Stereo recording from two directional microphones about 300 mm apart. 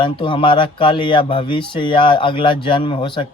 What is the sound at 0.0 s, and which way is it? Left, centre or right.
Speech, centre.